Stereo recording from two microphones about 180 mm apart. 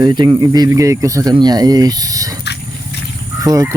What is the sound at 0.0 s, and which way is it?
Speech, 25° right (ahead or behind).